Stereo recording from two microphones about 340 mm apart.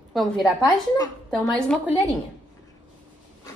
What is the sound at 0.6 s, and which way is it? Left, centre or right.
A woman's voice, centre.